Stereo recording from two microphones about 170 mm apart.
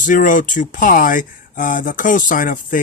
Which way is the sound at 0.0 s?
50° left (ahead or behind).